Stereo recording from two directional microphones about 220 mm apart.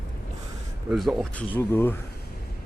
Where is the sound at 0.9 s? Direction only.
Centre (ahead or behind).